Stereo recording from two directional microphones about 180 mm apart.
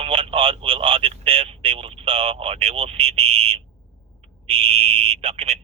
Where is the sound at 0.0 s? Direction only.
30° right (ahead or behind).